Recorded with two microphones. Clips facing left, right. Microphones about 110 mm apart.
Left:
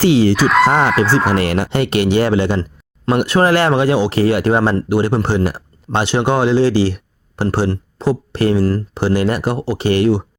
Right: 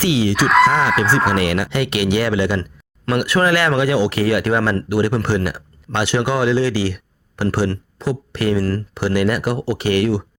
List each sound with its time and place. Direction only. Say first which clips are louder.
0.0 s speech: left 6 dB; 40° left (ahead or behind)
0.3 s speech: left 1 dB; centre (ahead or behind)
1.4 s speech: left 2 dB; 35° left (ahead or behind)